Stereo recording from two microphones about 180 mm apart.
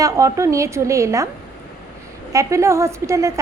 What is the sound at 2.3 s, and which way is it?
A woman's voice, 15° right (ahead or behind).